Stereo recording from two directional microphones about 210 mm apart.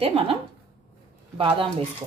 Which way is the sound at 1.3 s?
25° right (ahead or behind).